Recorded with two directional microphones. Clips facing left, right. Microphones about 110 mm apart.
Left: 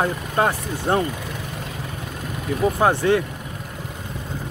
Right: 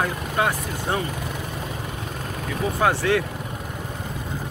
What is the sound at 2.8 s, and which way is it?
Speech, 25° left (ahead or behind).